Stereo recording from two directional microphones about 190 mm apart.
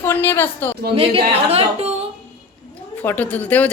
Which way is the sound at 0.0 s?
10° left (ahead or behind).